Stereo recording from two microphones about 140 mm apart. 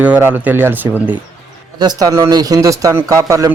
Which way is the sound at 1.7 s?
25° right (ahead or behind).